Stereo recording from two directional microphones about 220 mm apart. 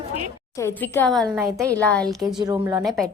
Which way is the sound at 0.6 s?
10° left (ahead or behind).